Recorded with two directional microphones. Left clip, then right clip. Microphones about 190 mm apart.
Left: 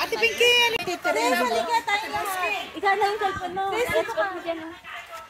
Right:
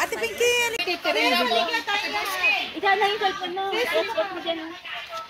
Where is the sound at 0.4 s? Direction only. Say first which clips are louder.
Left 1 dB; 25° right (ahead or behind).